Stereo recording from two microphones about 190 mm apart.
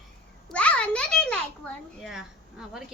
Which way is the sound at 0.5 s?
5° left (ahead or behind).